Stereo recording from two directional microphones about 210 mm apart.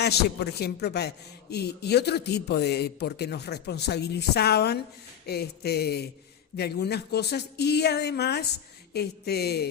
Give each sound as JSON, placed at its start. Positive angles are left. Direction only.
{"t": 0.0, "sound": "a man's voice", "side_deg": 50}